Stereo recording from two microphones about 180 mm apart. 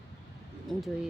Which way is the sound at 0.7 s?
Centre (ahead or behind).